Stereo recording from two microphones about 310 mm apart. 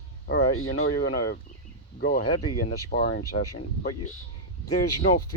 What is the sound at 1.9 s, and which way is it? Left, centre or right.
Speech, left.